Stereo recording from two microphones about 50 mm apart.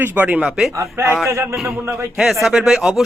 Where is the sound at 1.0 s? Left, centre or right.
Right.